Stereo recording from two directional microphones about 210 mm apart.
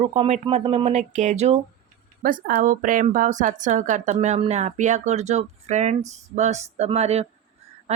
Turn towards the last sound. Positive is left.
turn(degrees=-30)  # may be behind; listen again after turning